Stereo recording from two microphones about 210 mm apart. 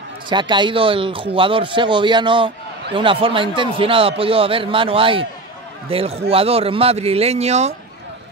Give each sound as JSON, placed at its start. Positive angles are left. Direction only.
{"t": 0.3, "sound": "speech", "side_deg": -20}